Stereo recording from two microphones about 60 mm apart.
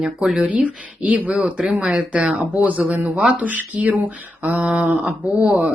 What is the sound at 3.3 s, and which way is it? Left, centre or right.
Speech, right.